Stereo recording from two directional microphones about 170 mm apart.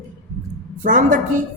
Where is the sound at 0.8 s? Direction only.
50° right (ahead or behind).